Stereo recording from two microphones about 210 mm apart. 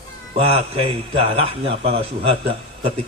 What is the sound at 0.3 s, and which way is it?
A man's voice, 30° right (ahead or behind).